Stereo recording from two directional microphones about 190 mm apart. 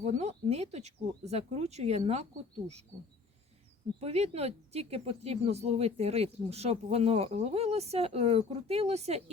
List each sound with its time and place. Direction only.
0.0 s speech: 35° right (ahead or behind)
4.0 s speech: 35° right (ahead or behind)